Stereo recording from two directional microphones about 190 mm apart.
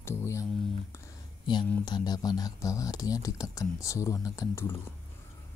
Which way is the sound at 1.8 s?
20° left (ahead or behind).